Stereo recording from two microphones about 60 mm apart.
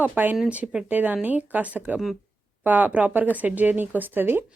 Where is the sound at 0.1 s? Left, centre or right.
Right.